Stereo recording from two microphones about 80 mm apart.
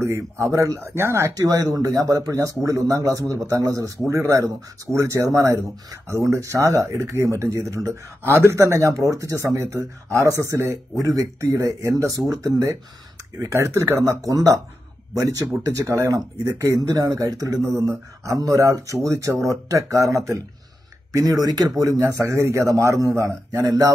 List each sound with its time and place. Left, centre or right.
0.0 s speech: right
1.3 s speech: right